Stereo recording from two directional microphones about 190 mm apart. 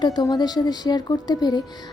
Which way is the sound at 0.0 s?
20° left (ahead or behind).